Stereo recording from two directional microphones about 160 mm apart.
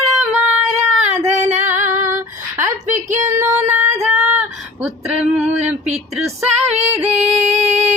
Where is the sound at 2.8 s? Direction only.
50° right (ahead or behind).